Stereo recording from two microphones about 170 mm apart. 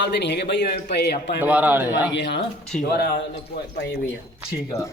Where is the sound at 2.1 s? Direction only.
85° left.